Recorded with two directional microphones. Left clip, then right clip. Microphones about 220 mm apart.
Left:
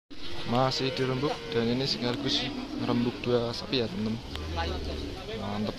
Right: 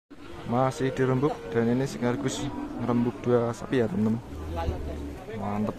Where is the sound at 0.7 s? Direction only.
20° right (ahead or behind).